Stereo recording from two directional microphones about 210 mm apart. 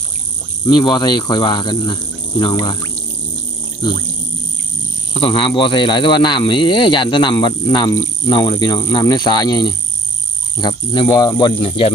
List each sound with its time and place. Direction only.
0.6 s speech: 20° left (ahead or behind)
5.2 s speech: 25° left (ahead or behind)